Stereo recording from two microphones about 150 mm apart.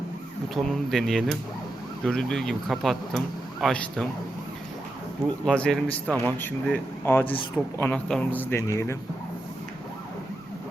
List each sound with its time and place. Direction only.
0.5 s speech: centre (ahead or behind)
5.5 s speech: 5° left (ahead or behind); by 9.0 s 20° left (ahead or behind)